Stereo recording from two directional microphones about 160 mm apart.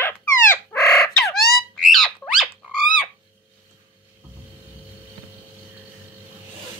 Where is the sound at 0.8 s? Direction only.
5° left (ahead or behind).